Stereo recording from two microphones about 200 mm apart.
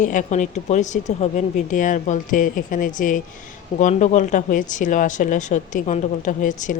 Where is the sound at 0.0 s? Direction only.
40° left (ahead or behind).